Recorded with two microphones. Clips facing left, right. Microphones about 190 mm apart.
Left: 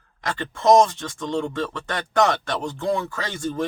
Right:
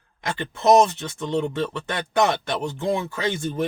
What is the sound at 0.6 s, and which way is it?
Speech, 20° right (ahead or behind).